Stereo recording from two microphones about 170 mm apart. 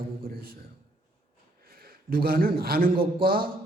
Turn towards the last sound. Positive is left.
turn(degrees=-60)  # may be behind; listen again after turning